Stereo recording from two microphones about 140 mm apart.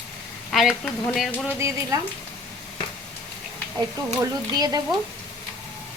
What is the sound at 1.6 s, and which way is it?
Stir, 20° right (ahead or behind).